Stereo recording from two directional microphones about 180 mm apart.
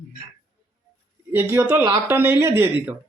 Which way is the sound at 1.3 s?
10° right (ahead or behind).